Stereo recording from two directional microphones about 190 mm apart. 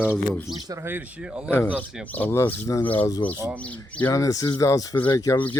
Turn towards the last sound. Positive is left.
turn(degrees=20)  # may be behind; listen again after turning